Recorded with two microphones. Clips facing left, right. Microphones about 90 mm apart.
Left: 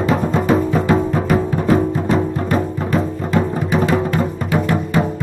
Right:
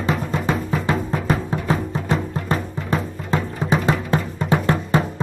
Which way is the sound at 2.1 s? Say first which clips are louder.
Left 3 dB; 40° left (ahead or behind).